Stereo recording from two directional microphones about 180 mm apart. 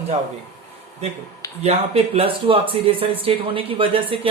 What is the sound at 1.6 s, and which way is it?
Speech, 35° right (ahead or behind).